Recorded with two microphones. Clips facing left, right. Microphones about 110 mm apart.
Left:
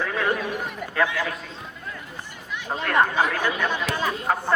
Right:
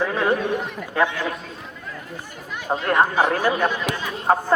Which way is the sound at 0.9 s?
25° right (ahead or behind).